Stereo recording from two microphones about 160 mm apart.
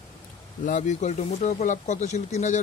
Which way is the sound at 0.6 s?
50° left (ahead or behind).